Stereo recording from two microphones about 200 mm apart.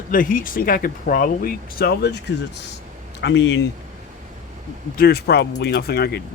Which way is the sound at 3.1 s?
60° left (ahead or behind).